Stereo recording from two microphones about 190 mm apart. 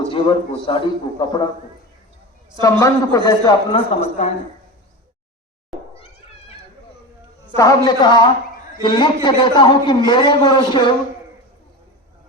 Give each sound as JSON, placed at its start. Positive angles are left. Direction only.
{"t": 0.1, "sound": "a man's voice", "side_deg": 25}
{"t": 2.6, "sound": "a man's voice", "side_deg": 15}
{"t": 7.5, "sound": "a man's voice", "side_deg": 15}